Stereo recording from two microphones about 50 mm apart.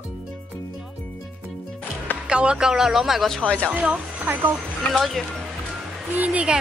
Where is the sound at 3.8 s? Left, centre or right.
Right.